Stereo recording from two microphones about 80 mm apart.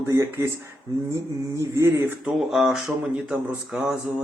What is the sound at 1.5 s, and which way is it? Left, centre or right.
Male singing, right.